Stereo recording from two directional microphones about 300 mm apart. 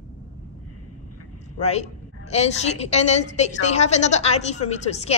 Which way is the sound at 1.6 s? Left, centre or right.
Left.